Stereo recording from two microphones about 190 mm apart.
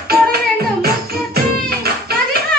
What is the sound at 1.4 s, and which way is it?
Music, 55° right (ahead or behind).